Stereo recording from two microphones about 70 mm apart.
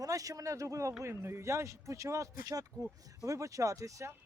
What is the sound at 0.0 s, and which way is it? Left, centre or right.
A man's voice, right.